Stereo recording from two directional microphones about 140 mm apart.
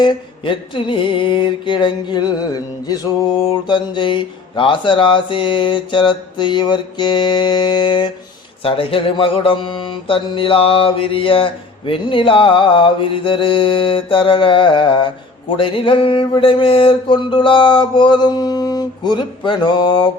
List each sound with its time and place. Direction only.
0.0 s mantra: 35° left (ahead or behind)